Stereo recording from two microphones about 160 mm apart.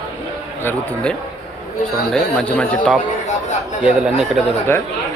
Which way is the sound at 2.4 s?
10° left (ahead or behind).